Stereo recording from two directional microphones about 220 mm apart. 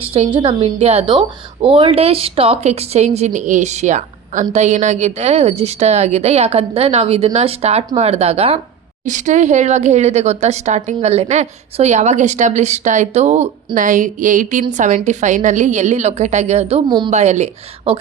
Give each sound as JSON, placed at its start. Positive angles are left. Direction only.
{"t": 0.0, "sound": "a woman's voice", "side_deg": -25}